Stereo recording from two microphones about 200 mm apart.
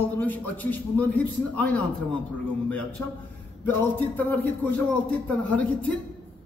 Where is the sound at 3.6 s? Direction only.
10° left (ahead or behind).